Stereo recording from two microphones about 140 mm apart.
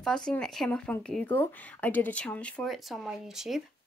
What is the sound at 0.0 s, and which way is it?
Speech, 5° left (ahead or behind).